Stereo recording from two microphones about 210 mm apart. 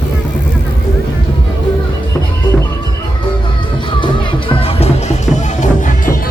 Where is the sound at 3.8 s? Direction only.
25° left (ahead or behind).